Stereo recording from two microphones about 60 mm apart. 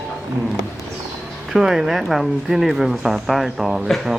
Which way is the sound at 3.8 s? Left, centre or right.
Centre.